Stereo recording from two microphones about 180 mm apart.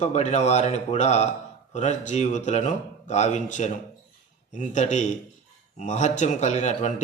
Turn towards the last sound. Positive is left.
turn(degrees=40)  # may be behind; listen again after turning